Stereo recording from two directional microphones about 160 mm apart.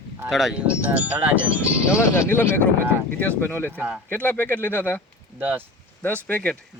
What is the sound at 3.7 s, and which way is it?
Speech, 10° right (ahead or behind).